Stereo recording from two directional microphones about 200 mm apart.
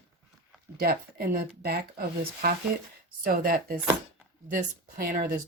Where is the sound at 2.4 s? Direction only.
50° right (ahead or behind).